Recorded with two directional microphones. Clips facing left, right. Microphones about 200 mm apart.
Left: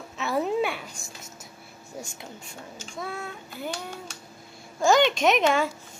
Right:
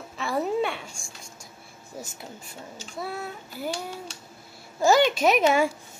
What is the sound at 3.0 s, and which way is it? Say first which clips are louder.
Speech: right 1 dB; 5° right (ahead or behind).